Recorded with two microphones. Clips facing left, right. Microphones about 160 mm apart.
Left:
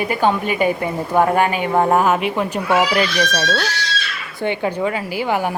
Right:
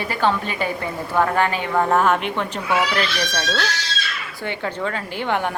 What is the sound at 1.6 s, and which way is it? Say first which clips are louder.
Speech: left 4 dB; 25° left (ahead or behind).